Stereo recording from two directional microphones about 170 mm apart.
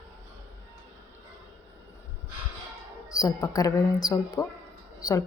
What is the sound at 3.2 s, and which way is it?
A woman's voice, 20° left (ahead or behind).